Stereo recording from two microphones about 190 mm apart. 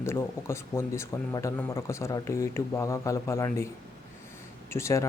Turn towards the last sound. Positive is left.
turn(degrees=15)  # may be behind; listen again after turning